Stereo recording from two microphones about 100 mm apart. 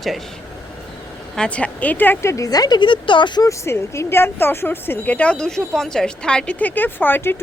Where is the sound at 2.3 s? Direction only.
40° left (ahead or behind).